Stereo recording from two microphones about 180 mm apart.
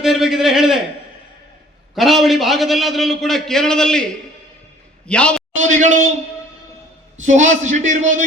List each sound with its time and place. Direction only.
0.0 s a man's voice: centre (ahead or behind)
2.0 s a man's voice: centre (ahead or behind)
5.5 s a man's voice: 40° right (ahead or behind)
7.2 s a man's voice: 40° right (ahead or behind)